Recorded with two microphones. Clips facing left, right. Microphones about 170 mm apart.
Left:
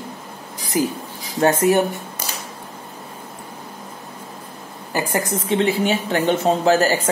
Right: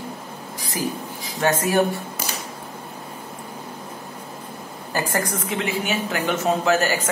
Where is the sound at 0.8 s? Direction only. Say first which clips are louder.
Left 6 dB; 20° left (ahead or behind).